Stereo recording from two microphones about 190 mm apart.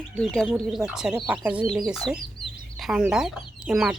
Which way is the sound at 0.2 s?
5° left (ahead or behind).